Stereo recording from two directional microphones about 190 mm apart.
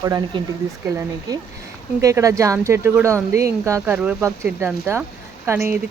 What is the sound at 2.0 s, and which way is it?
Speech, 15° right (ahead or behind).